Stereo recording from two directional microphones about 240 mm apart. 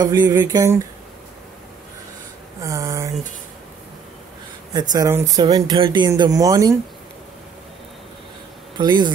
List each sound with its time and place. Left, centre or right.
0.0 s speech: centre
2.6 s a sound: centre
4.7 s speech: centre
8.7 s a man's voice: centre